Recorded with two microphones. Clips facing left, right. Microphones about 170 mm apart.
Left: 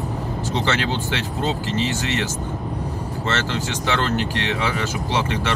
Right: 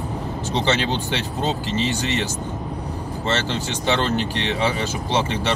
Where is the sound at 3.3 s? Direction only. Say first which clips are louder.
Right 1 dB; 20° right (ahead or behind).